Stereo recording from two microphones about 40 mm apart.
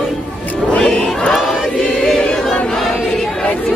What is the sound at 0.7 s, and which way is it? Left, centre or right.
Crowd, left.